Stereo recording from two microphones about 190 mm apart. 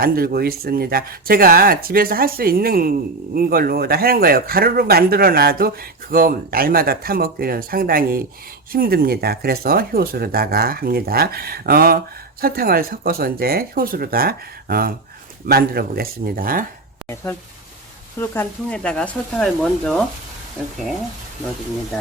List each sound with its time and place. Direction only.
0.0 s a man's voice: 55° right (ahead or behind)
18.2 s speech: 10° left (ahead or behind)